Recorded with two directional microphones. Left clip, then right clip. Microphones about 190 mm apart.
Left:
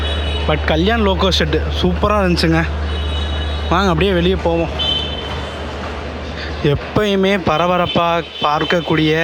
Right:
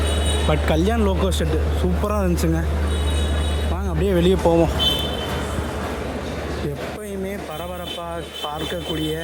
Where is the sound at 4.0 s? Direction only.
10° right (ahead or behind).